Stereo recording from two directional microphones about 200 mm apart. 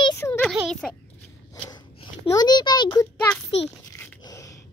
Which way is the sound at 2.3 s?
20° left (ahead or behind).